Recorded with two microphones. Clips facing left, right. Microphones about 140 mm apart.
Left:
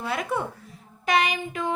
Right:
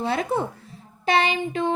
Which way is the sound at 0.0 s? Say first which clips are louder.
Right 4 dB; 30° right (ahead or behind).